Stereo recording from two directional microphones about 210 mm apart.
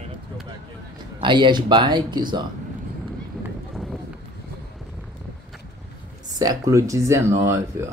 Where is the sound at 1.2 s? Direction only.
20° right (ahead or behind).